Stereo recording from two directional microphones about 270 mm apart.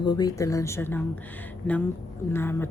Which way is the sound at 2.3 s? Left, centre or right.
Centre.